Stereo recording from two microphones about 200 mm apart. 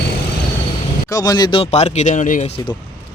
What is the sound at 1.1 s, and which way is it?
Speech, 20° left (ahead or behind).